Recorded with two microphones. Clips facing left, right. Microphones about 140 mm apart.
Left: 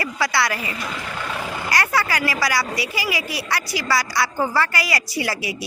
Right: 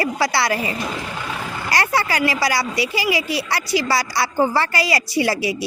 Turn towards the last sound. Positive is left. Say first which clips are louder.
# right 6 dB
turn(degrees=-30)  # may be behind; listen again after turning